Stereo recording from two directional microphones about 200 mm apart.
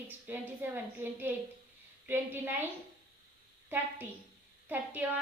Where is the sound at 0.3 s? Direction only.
10° right (ahead or behind).